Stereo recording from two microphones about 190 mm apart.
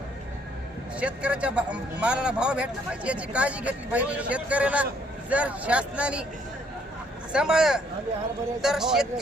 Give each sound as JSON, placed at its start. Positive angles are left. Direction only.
{"t": 0.9, "sound": "speech", "side_deg": -5}
{"t": 7.3, "sound": "speech", "side_deg": -5}